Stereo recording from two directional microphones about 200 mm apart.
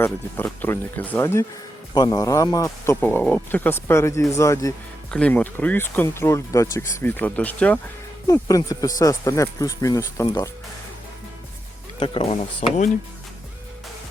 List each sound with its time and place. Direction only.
0.0 s speech: 10° left (ahead or behind)
8.3 s speech: 15° left (ahead or behind)
11.9 s speech: 25° left (ahead or behind)